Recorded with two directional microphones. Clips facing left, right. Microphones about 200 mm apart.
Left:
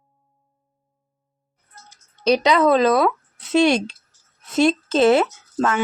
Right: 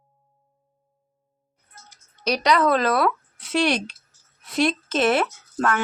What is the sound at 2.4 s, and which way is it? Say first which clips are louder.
Speech: left 2 dB; 20° left (ahead or behind).